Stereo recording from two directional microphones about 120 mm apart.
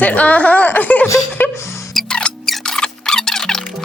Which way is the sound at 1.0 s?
20° left (ahead or behind).